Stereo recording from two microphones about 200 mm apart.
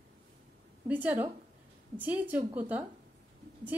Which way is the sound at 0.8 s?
10° right (ahead or behind).